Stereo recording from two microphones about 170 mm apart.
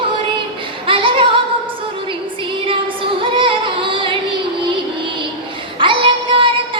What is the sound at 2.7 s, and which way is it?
Music, 30° right (ahead or behind).